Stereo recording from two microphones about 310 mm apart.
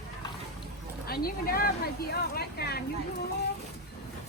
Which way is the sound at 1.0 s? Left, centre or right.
Left.